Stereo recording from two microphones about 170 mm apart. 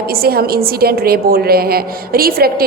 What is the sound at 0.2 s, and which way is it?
A woman's voice, 65° right (ahead or behind).